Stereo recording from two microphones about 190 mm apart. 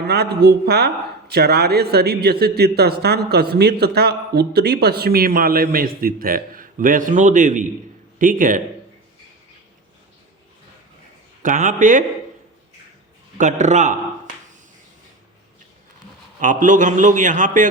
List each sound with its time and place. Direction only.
0.0 s speech: 60° right (ahead or behind)
11.4 s speech: 40° right (ahead or behind)
13.4 s a man's voice: 40° right (ahead or behind)
16.4 s a man's voice: 45° right (ahead or behind)